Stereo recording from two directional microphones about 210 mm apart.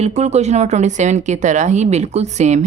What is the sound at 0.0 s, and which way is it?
Speech, 30° right (ahead or behind).